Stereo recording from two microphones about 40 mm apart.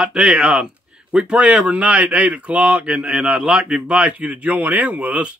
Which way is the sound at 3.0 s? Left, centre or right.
Centre.